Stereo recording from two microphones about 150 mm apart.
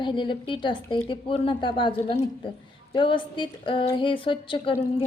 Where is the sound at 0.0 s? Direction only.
35° left (ahead or behind).